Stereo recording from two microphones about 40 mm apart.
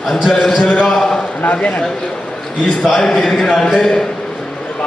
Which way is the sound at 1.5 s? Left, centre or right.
Left.